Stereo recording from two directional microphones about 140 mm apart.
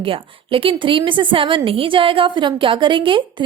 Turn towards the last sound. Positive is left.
turn(degrees=-35)  # may be behind; listen again after turning